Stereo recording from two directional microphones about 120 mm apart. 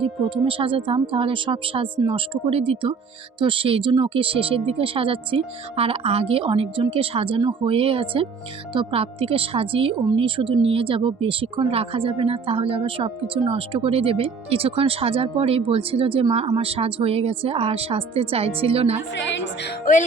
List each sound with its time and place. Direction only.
0.0 s speech: 45° right (ahead or behind)